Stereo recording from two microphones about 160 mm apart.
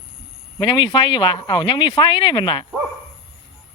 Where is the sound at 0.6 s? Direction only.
30° left (ahead or behind).